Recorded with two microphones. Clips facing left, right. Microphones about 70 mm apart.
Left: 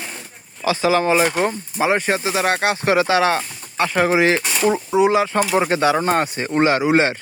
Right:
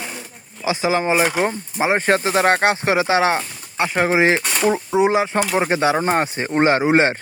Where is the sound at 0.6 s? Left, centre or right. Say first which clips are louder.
Left 2 dB; centre.